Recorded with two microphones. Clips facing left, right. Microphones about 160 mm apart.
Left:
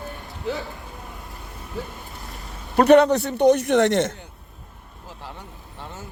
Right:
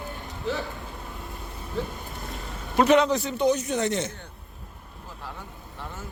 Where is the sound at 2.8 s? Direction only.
60° left (ahead or behind).